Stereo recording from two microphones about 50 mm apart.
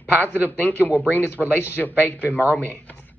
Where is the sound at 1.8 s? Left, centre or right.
Left.